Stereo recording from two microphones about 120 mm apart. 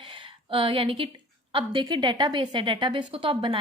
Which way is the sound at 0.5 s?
45° right (ahead or behind).